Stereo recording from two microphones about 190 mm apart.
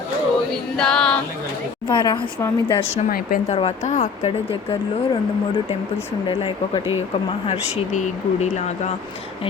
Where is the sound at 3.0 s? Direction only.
50° left (ahead or behind).